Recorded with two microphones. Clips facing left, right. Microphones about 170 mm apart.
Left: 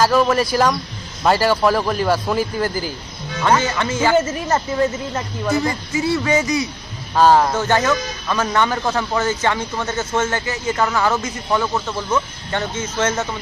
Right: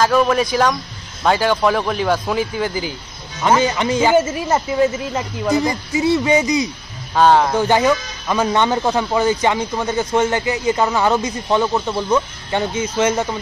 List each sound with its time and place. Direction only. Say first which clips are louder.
0.0 s speech: even; 5° left (ahead or behind)
3.4 s speech: right 2 dB; 15° right (ahead or behind)
7.2 s speech: even; centre (ahead or behind)
7.5 s speech: right 3 dB; 15° right (ahead or behind)